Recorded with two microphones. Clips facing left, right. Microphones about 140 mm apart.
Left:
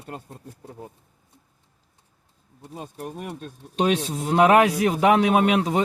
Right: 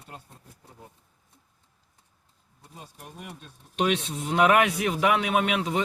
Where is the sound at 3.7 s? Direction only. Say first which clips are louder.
Left 4 dB; 35° left (ahead or behind).